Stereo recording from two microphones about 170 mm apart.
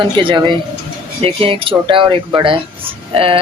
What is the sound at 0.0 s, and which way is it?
Speech, 30° right (ahead or behind).